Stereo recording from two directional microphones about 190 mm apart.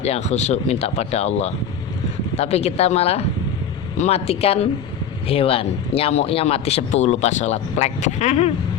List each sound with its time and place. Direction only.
0.0 s a man's voice: 35° left (ahead or behind)